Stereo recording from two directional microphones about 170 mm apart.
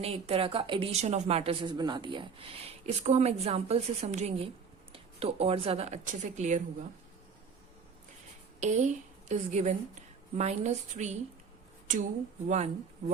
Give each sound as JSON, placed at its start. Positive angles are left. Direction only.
{"t": 0.0, "sound": "speech", "side_deg": -35}
{"t": 8.6, "sound": "a woman's voice", "side_deg": -45}